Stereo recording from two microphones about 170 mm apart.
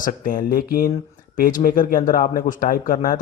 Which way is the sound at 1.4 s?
55° left (ahead or behind).